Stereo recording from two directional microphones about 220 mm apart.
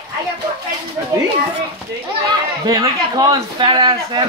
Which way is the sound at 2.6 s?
15° right (ahead or behind).